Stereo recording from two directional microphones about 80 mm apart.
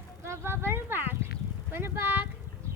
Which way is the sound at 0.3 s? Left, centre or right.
Right.